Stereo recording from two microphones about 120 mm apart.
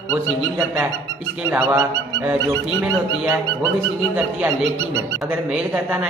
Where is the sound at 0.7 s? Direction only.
20° right (ahead or behind).